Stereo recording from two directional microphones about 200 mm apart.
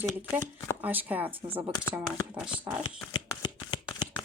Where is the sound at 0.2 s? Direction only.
10° right (ahead or behind).